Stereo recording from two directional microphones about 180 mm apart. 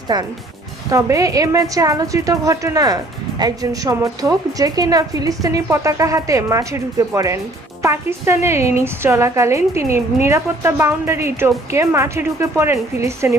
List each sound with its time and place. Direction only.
0.1 s a woman's voice: 20° right (ahead or behind)